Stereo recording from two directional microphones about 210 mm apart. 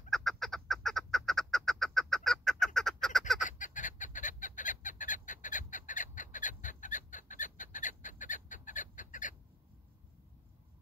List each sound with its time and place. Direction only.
0.1 s duck: centre (ahead or behind)
3.4 s fowl: 35° left (ahead or behind)